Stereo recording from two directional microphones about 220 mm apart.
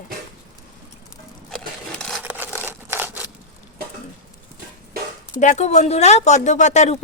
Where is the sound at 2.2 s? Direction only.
10° right (ahead or behind).